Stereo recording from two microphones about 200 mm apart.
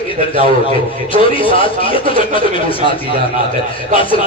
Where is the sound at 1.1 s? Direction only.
25° left (ahead or behind).